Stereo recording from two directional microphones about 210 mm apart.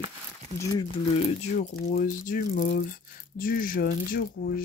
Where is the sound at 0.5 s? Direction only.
20° left (ahead or behind).